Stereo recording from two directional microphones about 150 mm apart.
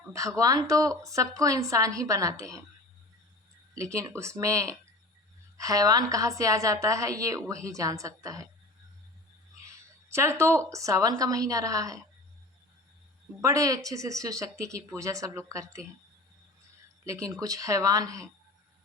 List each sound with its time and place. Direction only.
0.1 s a woman's voice: 20° right (ahead or behind)
3.8 s a woman's voice: 20° right (ahead or behind)
9.6 s speech: 20° right (ahead or behind)
13.4 s a woman's voice: 20° right (ahead or behind)
17.1 s a woman's voice: 20° right (ahead or behind)